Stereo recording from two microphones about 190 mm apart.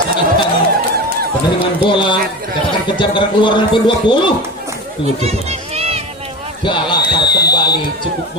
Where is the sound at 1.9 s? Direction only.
25° left (ahead or behind).